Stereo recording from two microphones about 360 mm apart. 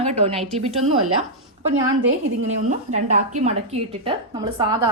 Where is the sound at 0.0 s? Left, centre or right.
Centre.